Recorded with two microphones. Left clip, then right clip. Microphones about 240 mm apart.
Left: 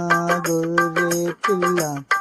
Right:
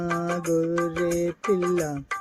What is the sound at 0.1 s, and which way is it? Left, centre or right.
Music, left.